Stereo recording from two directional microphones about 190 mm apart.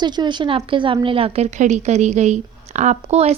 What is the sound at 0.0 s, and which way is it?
A woman's voice, 25° right (ahead or behind).